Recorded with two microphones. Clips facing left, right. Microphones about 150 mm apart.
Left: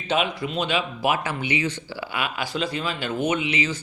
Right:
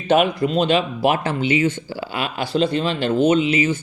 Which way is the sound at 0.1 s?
45° right (ahead or behind).